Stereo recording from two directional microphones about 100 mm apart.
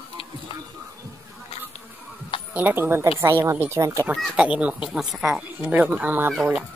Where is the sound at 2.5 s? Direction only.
20° right (ahead or behind).